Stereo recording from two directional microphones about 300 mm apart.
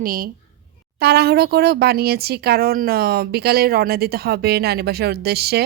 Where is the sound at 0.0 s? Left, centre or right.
Right.